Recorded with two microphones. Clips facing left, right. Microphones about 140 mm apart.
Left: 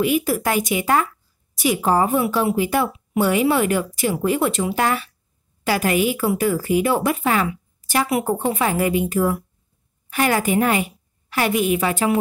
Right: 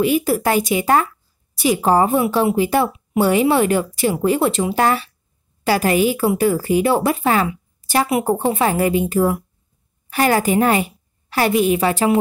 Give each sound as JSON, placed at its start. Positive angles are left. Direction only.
{"t": 0.0, "sound": "a woman's voice", "side_deg": -30}